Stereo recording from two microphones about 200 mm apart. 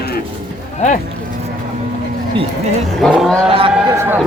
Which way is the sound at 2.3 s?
30° right (ahead or behind).